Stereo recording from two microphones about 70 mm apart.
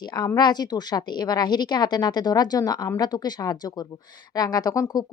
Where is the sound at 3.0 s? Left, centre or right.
Left.